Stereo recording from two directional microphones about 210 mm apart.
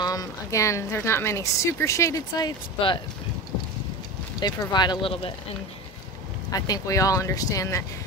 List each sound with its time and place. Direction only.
0.0 s a woman's voice: 15° left (ahead or behind)
4.4 s speech: 20° left (ahead or behind)
6.5 s a woman's voice: 15° left (ahead or behind)